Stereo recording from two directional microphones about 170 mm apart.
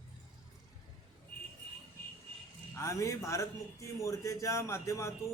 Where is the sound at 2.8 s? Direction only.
20° left (ahead or behind).